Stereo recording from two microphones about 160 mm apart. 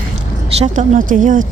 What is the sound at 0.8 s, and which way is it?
Speech, 50° right (ahead or behind).